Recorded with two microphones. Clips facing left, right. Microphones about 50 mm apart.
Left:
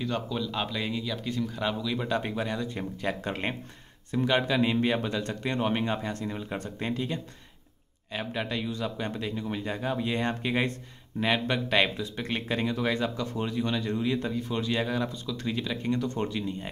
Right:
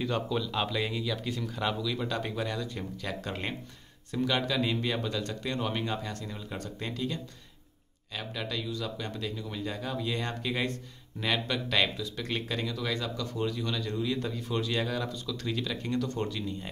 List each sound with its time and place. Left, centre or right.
0.0 s speech: centre